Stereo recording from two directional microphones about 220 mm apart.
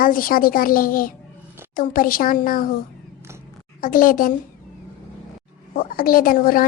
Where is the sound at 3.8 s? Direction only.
40° left (ahead or behind).